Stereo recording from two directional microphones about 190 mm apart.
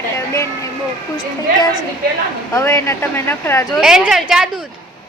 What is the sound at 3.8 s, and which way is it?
Speech, 5° right (ahead or behind).